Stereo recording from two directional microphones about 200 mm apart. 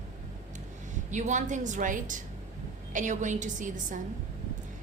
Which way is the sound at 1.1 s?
35° right (ahead or behind).